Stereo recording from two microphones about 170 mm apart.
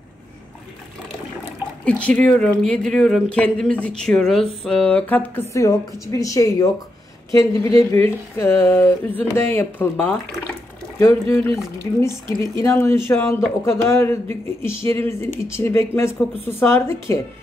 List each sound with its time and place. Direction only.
1.9 s speech: 5° left (ahead or behind)